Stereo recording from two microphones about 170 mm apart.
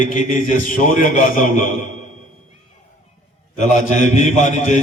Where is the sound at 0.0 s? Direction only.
50° left (ahead or behind).